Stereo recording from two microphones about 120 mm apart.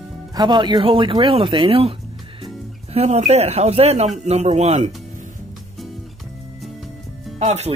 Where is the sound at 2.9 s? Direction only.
65° right (ahead or behind).